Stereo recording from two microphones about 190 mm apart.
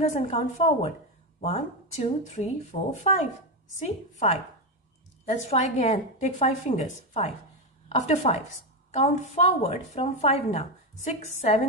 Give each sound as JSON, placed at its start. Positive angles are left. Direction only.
{"t": 0.1, "sound": "a woman's voice", "side_deg": 35}